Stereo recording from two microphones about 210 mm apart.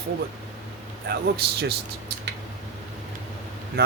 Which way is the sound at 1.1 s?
50° right (ahead or behind).